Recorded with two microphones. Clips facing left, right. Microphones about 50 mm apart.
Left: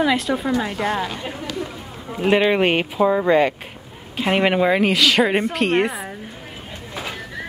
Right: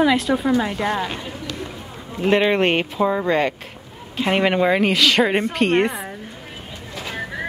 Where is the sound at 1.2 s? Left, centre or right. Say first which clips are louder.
Left 2 dB; centre.